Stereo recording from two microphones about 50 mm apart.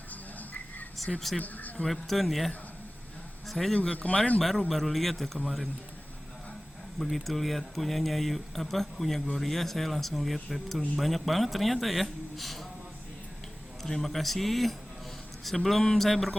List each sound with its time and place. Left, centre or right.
0.1 s a sound: left
1.4 s speech: left
1.8 s a man's voice: centre
3.9 s speech: left
4.4 s speech: centre
7.0 s speech: centre
13.8 s speech: centre